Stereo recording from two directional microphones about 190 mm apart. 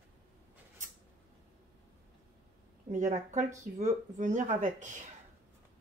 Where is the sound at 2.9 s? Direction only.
40° right (ahead or behind).